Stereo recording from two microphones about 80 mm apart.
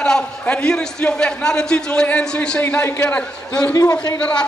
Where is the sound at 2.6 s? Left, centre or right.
Left.